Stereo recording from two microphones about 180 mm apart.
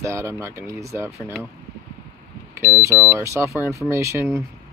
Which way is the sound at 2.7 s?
10° right (ahead or behind).